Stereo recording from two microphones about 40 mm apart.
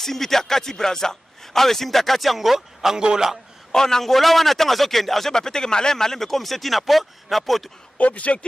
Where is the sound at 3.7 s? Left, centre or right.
Centre.